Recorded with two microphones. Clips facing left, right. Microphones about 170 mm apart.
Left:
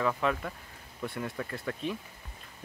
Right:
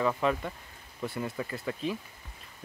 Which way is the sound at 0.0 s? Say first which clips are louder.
Right 2 dB; centre (ahead or behind).